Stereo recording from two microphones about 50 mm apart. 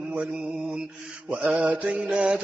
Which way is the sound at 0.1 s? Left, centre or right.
Right.